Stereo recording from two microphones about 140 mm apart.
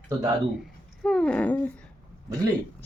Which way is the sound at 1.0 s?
5° left (ahead or behind).